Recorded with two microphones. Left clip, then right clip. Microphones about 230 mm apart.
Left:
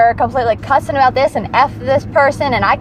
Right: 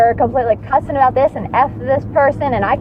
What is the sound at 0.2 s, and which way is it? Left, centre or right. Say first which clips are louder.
Speech: even; left.